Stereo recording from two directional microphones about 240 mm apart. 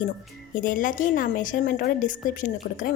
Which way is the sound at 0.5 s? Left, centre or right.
Left.